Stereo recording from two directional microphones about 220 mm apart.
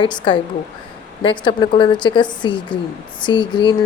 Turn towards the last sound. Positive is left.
turn(degrees=20)  # may be behind; listen again after turning